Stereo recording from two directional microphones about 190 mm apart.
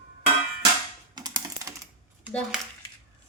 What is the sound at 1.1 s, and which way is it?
Typing, 20° right (ahead or behind).